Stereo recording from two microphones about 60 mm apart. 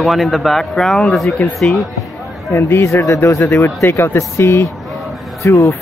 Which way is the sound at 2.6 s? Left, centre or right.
Left.